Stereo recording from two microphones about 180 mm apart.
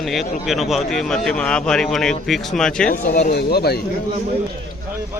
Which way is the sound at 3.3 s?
60° left (ahead or behind).